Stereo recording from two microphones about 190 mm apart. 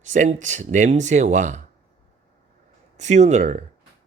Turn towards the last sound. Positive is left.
turn(degrees=-40)  # may be behind; listen again after turning